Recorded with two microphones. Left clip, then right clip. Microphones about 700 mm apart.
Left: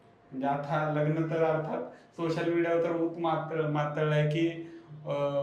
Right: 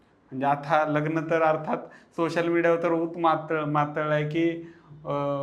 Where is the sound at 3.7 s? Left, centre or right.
Right.